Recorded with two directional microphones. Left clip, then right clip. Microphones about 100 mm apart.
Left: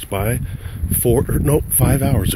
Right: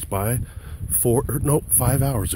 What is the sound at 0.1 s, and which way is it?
Speech, 50° right (ahead or behind).